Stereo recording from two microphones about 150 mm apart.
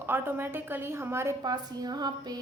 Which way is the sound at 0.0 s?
15° right (ahead or behind).